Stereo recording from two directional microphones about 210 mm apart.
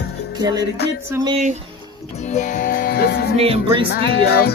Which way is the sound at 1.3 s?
35° right (ahead or behind).